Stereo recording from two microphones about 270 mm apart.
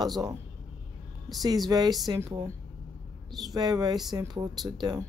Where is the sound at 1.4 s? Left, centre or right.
Centre.